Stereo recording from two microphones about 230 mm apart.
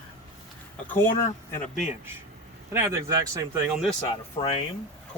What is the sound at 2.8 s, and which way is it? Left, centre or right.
Speech, centre.